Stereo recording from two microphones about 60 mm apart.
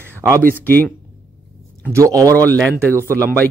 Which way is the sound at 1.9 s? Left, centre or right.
Right.